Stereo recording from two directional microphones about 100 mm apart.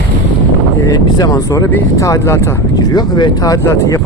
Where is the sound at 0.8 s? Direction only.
35° left (ahead or behind).